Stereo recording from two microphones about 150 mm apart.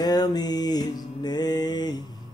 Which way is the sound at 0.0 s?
25° left (ahead or behind).